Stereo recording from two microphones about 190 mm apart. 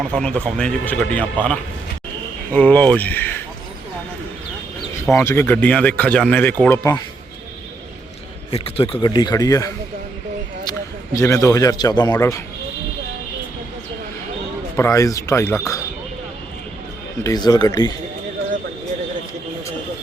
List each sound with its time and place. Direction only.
0.0 s a man's voice: 5° left (ahead or behind)
5.0 s speech: 10° left (ahead or behind)
8.4 s a man's voice: 30° left (ahead or behind)
14.8 s speech: 15° left (ahead or behind)
17.2 s a man's voice: 20° left (ahead or behind)